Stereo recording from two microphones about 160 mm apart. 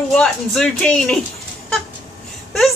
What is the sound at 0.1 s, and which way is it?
Speech, 5° left (ahead or behind).